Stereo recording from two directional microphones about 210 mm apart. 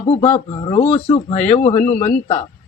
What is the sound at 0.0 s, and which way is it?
Speech, 30° left (ahead or behind).